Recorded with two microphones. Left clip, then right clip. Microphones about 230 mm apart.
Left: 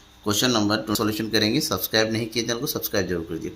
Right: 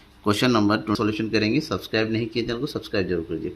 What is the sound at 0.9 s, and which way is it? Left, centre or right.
Speech, centre.